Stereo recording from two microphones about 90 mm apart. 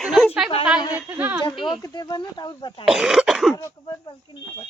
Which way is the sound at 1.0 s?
20° right (ahead or behind).